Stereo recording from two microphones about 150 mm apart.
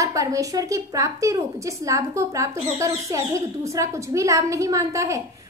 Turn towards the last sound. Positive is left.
turn(degrees=-20)  # may be behind; listen again after turning